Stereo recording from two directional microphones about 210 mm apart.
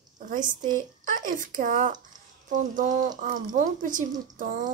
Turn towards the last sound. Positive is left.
turn(degrees=-40)  # may be behind; listen again after turning